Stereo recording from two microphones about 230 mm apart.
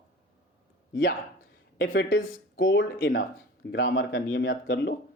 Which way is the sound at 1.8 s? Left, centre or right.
Left.